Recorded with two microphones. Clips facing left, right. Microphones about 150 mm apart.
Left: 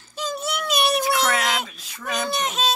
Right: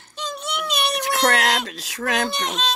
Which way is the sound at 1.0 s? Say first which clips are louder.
Right 2 dB; 75° right (ahead or behind).